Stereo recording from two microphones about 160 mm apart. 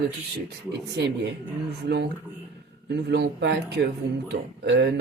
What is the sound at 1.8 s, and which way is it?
Speech, 90° right.